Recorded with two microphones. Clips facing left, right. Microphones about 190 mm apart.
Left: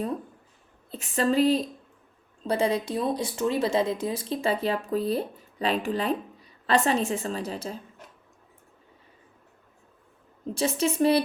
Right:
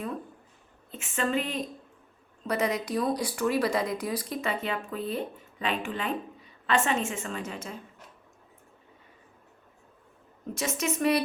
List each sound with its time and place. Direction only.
0.9 s speech: 35° left (ahead or behind)
10.5 s speech: 30° left (ahead or behind)